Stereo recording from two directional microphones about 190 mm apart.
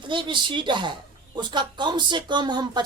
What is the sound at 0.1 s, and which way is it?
Speech, 25° right (ahead or behind).